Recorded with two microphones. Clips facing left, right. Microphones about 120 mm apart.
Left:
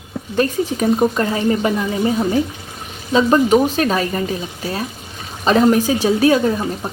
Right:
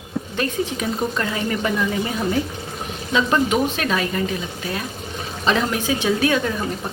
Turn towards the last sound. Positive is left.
turn(degrees=35)  # may be behind; listen again after turning